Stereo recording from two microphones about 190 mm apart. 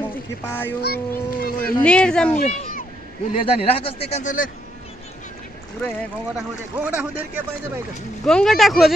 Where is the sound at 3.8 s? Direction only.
30° left (ahead or behind).